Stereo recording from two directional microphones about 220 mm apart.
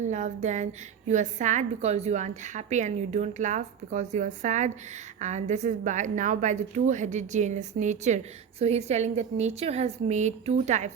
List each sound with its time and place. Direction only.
0.0 s a woman's voice: 30° right (ahead or behind)